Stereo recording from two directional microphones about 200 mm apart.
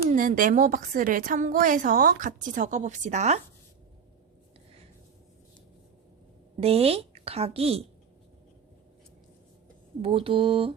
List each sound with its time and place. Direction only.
0.1 s a woman's voice: 45° right (ahead or behind)
6.6 s a woman's voice: 30° right (ahead or behind)
10.0 s a woman's voice: 25° right (ahead or behind)